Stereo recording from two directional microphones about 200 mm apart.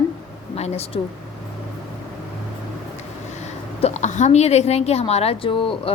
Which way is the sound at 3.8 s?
35° left (ahead or behind).